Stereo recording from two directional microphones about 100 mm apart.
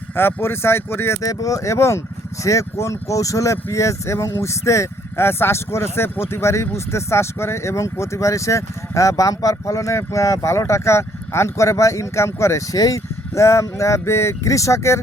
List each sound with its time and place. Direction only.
0.2 s speech: 25° left (ahead or behind)